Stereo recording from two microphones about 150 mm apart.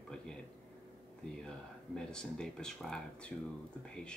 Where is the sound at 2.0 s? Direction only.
5° left (ahead or behind).